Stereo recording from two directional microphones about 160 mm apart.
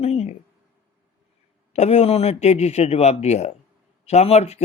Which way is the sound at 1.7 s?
45° left (ahead or behind).